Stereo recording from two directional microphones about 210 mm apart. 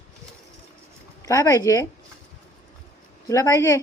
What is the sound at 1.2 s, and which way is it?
Speech, 15° left (ahead or behind).